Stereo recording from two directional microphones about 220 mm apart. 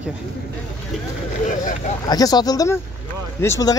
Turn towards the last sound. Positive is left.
turn(degrees=15)  # may be behind; listen again after turning